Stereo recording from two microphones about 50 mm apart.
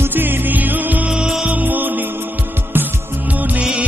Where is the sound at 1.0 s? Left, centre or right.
Centre.